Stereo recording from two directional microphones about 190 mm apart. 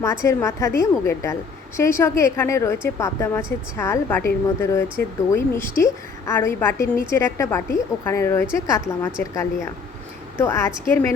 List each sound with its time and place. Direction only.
0.0 s a woman's voice: 15° left (ahead or behind)